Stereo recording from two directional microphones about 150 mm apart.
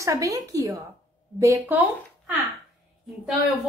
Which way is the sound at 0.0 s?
20° right (ahead or behind).